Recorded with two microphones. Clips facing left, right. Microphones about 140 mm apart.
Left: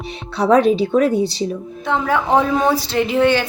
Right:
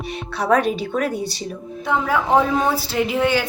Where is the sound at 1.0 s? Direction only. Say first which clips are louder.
Left 7 dB; 50° right (ahead or behind).